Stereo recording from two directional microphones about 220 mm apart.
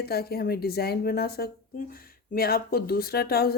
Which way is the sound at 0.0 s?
45° left (ahead or behind).